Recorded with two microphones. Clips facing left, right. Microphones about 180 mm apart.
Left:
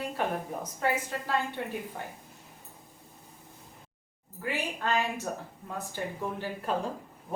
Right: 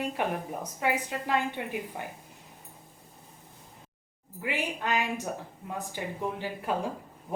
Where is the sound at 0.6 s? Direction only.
15° right (ahead or behind).